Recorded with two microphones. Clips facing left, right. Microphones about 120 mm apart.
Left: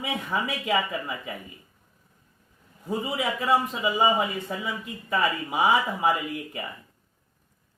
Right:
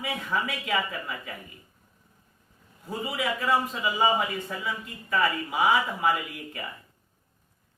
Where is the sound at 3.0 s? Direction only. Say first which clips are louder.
Right 1 dB; 25° left (ahead or behind).